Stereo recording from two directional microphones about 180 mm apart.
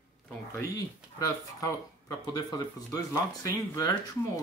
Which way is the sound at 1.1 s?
20° left (ahead or behind).